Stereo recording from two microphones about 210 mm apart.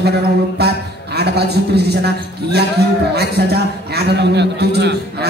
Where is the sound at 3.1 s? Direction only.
50° right (ahead or behind).